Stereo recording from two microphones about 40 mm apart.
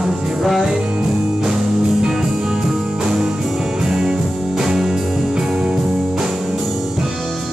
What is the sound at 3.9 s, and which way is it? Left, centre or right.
Music, centre.